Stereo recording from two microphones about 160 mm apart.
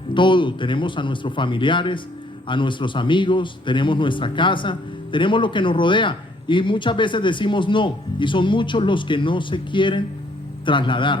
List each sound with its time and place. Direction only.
0.1 s a man's voice: 30° left (ahead or behind)